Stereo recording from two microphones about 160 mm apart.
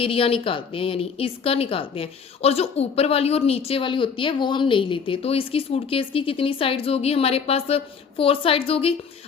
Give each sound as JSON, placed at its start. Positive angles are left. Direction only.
{"t": 0.0, "sound": "a woman's voice", "side_deg": 35}